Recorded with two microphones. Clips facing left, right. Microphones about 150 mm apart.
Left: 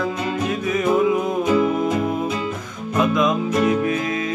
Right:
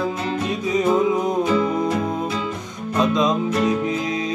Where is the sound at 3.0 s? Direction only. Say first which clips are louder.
Even; 20° right (ahead or behind).